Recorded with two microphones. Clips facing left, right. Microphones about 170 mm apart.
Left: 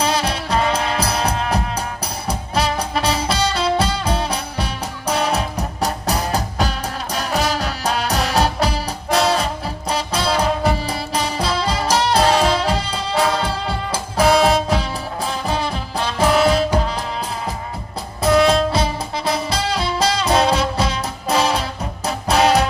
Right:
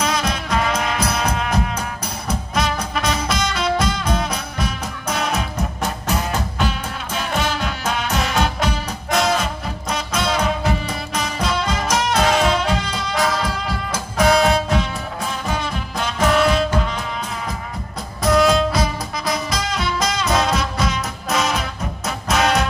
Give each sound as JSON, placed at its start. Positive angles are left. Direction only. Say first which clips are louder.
{"t": 0.0, "sound": "music", "louder": "left 2 dB", "side_deg": 30}
{"t": 18.7, "sound": "music", "louder": "left 1 dB", "side_deg": 30}